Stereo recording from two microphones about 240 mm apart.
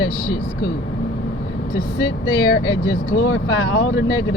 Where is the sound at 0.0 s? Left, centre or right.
Left.